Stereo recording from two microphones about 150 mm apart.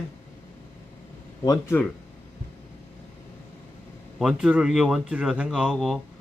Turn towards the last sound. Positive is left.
turn(degrees=0)  # may be behind; listen again after turning